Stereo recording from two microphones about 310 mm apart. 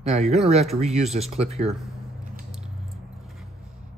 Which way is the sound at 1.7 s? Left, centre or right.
Centre.